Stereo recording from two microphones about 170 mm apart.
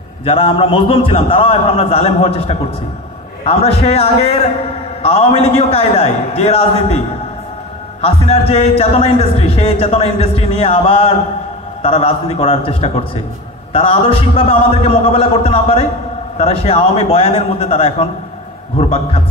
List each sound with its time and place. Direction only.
0.2 s a man's voice: 35° left (ahead or behind)
8.0 s a man's voice: 35° left (ahead or behind)